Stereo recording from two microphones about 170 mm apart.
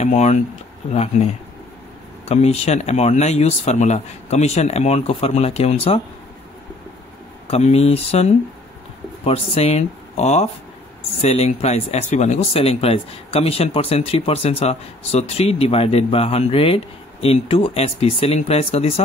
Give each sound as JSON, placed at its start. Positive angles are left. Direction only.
{"t": 0.0, "sound": "speech", "side_deg": 40}
{"t": 7.4, "sound": "speech", "side_deg": 40}